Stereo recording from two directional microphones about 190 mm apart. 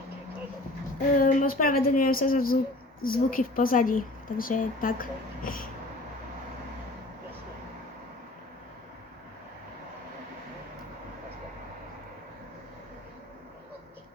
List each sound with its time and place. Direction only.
1.2 s a woman's voice: 45° left (ahead or behind)